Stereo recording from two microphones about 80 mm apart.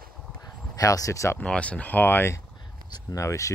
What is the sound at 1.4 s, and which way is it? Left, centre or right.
Speech, centre.